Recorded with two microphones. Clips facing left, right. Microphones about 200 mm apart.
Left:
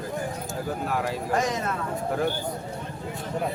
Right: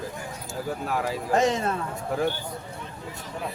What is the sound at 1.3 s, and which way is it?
Speech, 25° right (ahead or behind).